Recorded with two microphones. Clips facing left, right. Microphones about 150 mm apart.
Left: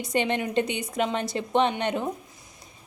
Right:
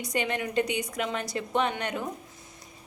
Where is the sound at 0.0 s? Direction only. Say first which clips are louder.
Left 4 dB; 25° left (ahead or behind).